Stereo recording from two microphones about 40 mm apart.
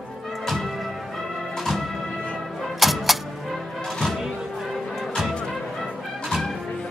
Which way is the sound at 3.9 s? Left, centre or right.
Centre.